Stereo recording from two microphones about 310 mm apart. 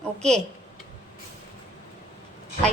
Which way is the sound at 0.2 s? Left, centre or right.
Centre.